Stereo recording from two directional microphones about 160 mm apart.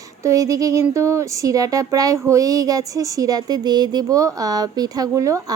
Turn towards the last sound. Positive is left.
turn(degrees=-20)  # may be behind; listen again after turning